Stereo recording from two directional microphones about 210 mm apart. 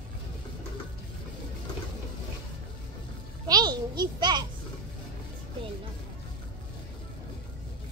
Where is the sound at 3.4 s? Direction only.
20° right (ahead or behind).